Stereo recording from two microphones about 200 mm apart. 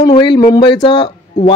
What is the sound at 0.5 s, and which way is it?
Speech, 25° left (ahead or behind).